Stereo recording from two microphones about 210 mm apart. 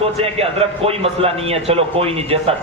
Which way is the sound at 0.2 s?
30° right (ahead or behind).